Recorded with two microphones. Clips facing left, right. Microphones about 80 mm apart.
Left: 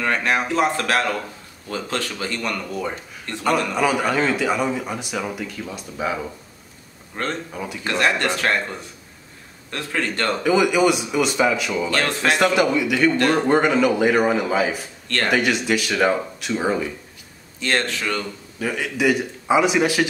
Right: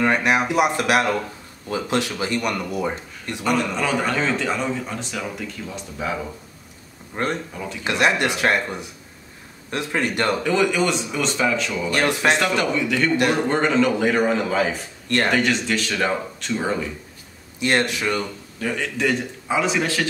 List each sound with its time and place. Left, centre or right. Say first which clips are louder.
0.0 s speech: right 2 dB; centre
3.7 s a man's voice: left 2 dB; centre
7.2 s speech: right 2 dB; centre
7.5 s a man's voice: left 1 dB; centre
7.8 s speech: right 1 dB; centre
10.4 s a man's voice: left 6 dB; centre
11.9 s speech: right 3 dB; centre
12.5 s a man's voice: left 3 dB; centre
17.6 s speech: right 2 dB; centre
18.6 s a man's voice: left 1 dB; centre